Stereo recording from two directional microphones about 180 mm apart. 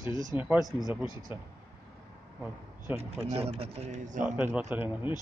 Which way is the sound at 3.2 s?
35° right (ahead or behind).